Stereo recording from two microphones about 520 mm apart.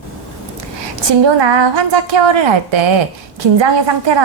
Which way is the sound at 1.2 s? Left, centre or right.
Right.